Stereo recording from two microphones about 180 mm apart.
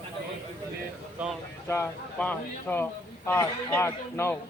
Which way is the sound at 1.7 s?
10° left (ahead or behind).